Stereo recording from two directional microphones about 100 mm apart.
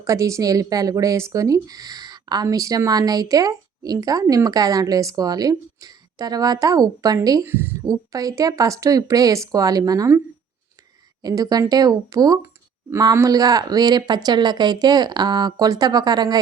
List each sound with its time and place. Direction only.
0.0 s speech: 30° right (ahead or behind)
7.4 s a woman's voice: 20° right (ahead or behind)
7.9 s speech: 35° right (ahead or behind)
11.2 s speech: 40° right (ahead or behind)